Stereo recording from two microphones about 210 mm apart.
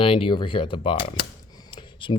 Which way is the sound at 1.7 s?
25° left (ahead or behind).